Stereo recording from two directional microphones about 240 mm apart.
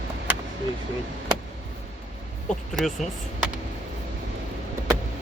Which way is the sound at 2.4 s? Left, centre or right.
Centre.